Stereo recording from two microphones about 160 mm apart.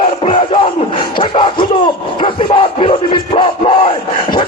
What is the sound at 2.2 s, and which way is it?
Music, 35° left (ahead or behind).